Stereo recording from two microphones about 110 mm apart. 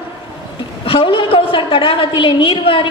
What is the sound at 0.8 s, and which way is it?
A woman's voice, 55° left (ahead or behind).